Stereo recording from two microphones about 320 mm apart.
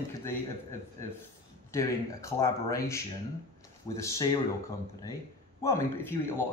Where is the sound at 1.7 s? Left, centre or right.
Centre.